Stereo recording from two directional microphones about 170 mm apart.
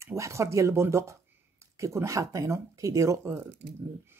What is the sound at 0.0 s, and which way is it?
Speech, 15° right (ahead or behind).